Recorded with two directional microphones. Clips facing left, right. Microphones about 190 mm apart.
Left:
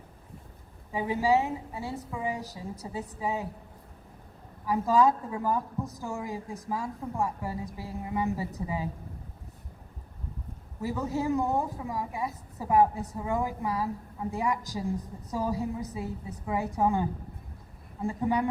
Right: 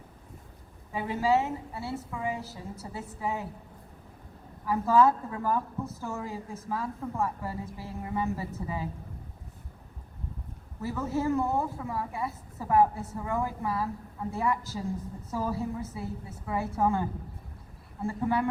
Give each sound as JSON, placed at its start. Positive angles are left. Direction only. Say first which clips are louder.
{"t": 0.9, "sound": "a woman's voice", "louder": "left 1 dB", "side_deg": 15}
{"t": 4.6, "sound": "a woman's voice", "louder": "right 1 dB", "side_deg": 15}
{"t": 10.8, "sound": "a woman's voice", "louder": "even", "side_deg": 15}